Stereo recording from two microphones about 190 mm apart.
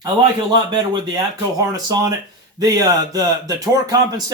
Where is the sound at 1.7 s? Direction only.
20° right (ahead or behind).